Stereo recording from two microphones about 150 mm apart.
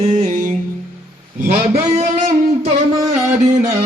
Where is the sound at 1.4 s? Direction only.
80° right.